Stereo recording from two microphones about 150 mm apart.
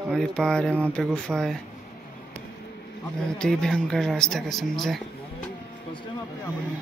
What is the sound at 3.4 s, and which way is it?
Speech, 5° left (ahead or behind).